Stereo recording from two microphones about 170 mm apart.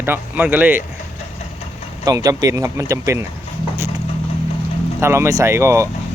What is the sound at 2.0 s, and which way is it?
Speech, 20° right (ahead or behind).